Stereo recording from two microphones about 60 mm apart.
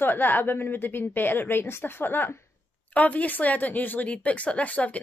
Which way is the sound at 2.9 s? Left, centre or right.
Left.